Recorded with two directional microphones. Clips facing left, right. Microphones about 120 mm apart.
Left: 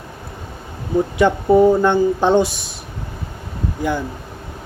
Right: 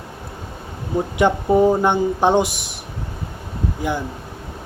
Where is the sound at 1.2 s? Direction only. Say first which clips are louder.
Left 2 dB; 15° right (ahead or behind).